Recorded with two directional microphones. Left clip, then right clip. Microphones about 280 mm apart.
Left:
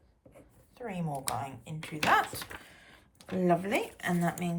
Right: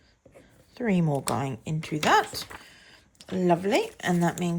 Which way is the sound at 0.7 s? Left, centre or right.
Right.